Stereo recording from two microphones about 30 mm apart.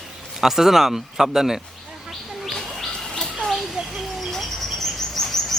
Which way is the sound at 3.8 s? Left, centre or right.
Right.